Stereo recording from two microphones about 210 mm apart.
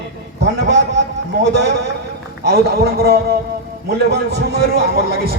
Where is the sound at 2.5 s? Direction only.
50° right (ahead or behind).